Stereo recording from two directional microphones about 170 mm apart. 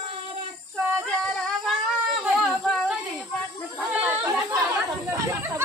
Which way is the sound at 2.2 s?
5° right (ahead or behind).